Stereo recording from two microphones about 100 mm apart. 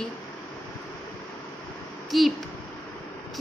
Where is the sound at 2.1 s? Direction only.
Centre (ahead or behind).